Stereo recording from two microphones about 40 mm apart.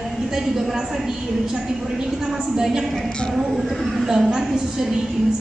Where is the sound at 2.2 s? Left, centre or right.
Centre.